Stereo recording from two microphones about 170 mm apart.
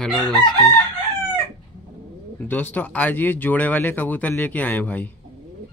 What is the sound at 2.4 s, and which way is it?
Speech, 10° left (ahead or behind).